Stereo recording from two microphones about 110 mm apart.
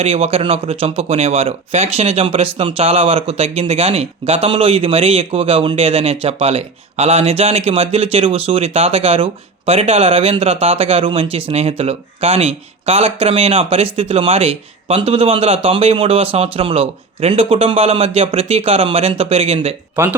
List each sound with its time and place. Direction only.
0.0 s speech: 65° right (ahead or behind)
20.0 s speech: 20° right (ahead or behind)